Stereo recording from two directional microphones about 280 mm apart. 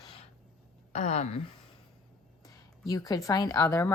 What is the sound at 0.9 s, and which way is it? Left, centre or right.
Speech, left.